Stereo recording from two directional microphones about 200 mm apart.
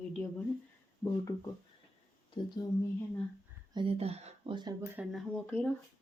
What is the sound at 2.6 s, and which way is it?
Speech, 20° left (ahead or behind).